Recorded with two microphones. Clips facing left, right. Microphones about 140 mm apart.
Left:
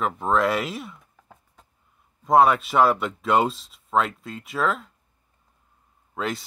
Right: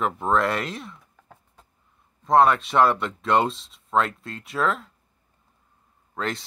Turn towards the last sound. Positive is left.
turn(degrees=5)  # may be behind; listen again after turning